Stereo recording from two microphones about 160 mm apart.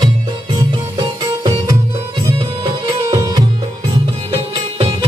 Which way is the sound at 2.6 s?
30° right (ahead or behind).